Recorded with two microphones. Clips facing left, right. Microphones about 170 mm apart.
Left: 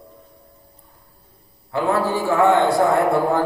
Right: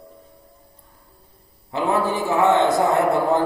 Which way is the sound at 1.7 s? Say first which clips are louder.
Left 1 dB; 20° right (ahead or behind).